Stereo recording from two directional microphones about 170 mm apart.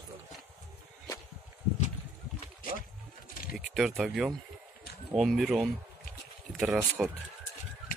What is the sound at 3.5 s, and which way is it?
Speech, centre (ahead or behind).